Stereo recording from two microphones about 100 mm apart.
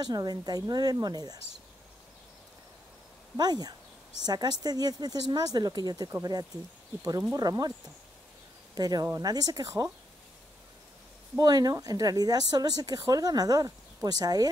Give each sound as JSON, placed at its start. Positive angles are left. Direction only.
{"t": 0.0, "sound": "a woman's voice", "side_deg": -40}
{"t": 3.3, "sound": "a woman's voice", "side_deg": -45}
{"t": 8.7, "sound": "a woman's voice", "side_deg": -40}
{"t": 11.3, "sound": "a woman's voice", "side_deg": -40}